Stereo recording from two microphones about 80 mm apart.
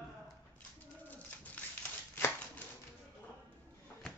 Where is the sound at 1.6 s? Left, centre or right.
Centre.